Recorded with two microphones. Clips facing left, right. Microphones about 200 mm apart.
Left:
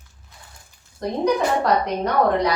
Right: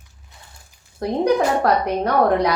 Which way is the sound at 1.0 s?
60° right (ahead or behind).